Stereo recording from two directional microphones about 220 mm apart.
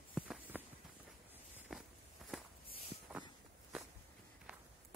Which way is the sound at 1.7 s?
Centre (ahead or behind).